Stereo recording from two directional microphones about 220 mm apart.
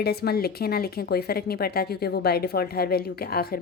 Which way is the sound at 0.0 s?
45° left (ahead or behind).